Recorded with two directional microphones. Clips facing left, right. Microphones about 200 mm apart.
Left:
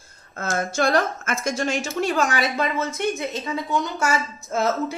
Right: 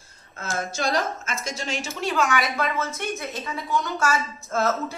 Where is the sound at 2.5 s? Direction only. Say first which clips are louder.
Left 2 dB; 20° left (ahead or behind).